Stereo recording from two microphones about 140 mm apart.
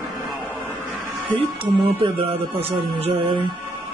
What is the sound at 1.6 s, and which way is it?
Speech, 40° right (ahead or behind).